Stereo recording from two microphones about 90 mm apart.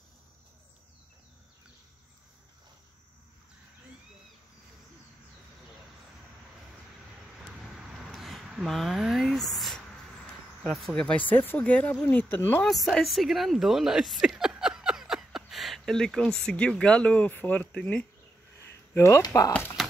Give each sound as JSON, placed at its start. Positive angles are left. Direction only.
{"t": 8.1, "sound": "a sound", "side_deg": 0}
{"t": 10.6, "sound": "speech", "side_deg": 0}
{"t": 12.6, "sound": "a woman's voice", "side_deg": 5}
{"t": 18.6, "sound": "a sound", "side_deg": 30}
{"t": 19.2, "sound": "speech", "side_deg": 40}
{"t": 19.8, "sound": "tap", "side_deg": 5}